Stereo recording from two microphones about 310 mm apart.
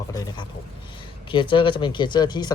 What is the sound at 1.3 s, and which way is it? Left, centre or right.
Speech, centre.